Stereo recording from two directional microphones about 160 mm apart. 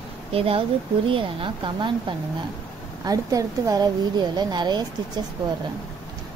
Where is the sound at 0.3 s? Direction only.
35° right (ahead or behind).